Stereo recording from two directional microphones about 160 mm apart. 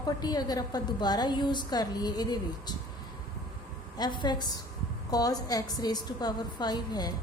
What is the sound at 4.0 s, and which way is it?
A woman's voice, 30° left (ahead or behind).